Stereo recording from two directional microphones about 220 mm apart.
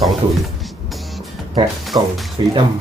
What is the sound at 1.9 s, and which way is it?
Speech, 20° right (ahead or behind).